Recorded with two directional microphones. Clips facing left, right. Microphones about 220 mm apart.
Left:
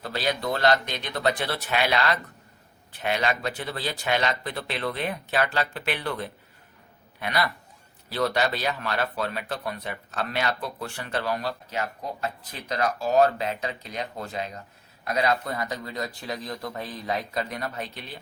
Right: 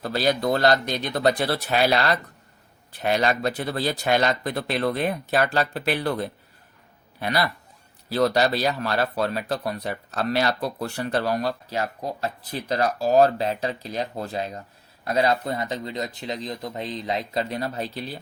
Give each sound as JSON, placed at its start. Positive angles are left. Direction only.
{"t": 0.0, "sound": "speech", "side_deg": -40}